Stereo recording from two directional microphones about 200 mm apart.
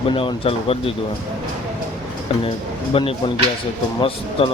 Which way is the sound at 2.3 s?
25° left (ahead or behind).